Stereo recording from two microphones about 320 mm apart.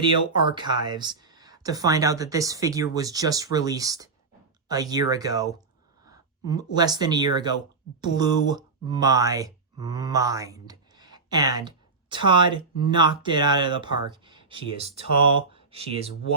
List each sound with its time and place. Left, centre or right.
0.3 s speech: centre